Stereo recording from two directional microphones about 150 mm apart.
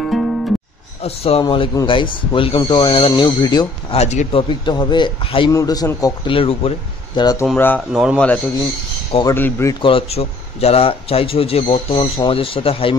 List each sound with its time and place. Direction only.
0.0 s music: centre (ahead or behind)
1.0 s speech: 40° left (ahead or behind)
3.9 s speech: 45° left (ahead or behind)
5.5 s a man's voice: 25° left (ahead or behind)
6.3 s speech: 40° left (ahead or behind)
7.2 s a man's voice: 25° left (ahead or behind)
7.5 s speech: 10° left (ahead or behind)
7.9 s a man's voice: 5° right (ahead or behind)
9.2 s a man's voice: 15° left (ahead or behind)
9.8 s speech: 35° left (ahead or behind)